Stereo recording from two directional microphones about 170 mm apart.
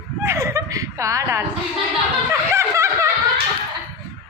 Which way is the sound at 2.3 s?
15° right (ahead or behind).